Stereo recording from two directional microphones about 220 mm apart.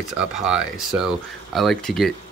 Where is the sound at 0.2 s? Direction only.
5° right (ahead or behind).